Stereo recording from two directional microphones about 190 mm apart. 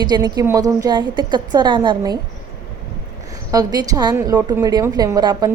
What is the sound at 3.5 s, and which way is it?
A woman's voice, 20° right (ahead or behind).